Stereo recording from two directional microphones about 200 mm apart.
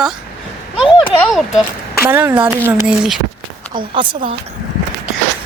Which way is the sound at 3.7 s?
25° right (ahead or behind).